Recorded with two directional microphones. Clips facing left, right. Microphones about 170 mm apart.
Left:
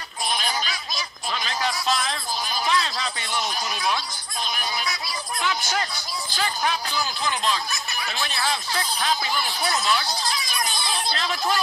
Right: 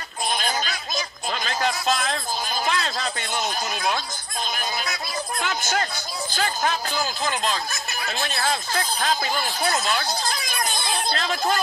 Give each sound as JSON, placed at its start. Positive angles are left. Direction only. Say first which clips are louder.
{"t": 0.5, "sound": "a sound", "louder": "right 2 dB", "side_deg": -45}
{"t": 5.4, "sound": "music", "louder": "even", "side_deg": -50}
{"t": 6.3, "sound": "speech", "louder": "right 1 dB", "side_deg": -45}